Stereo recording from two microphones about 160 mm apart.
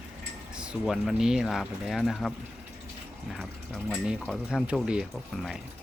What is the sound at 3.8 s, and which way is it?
Speech, centre (ahead or behind).